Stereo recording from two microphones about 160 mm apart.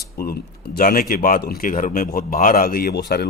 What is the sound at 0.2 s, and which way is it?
Speech, 70° left (ahead or behind).